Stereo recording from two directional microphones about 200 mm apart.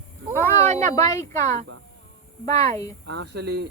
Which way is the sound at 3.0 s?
60° right (ahead or behind).